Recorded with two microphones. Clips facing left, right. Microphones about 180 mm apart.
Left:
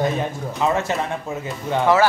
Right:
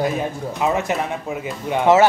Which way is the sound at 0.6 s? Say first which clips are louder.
Even; 15° right (ahead or behind).